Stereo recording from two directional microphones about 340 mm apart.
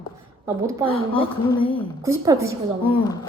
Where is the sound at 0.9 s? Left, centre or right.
Centre.